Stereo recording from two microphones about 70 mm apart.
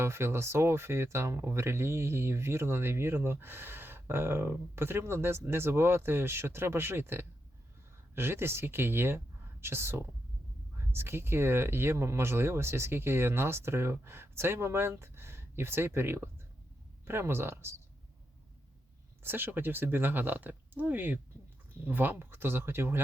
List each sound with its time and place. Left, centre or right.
0.0 s speech: right
19.2 s speech: right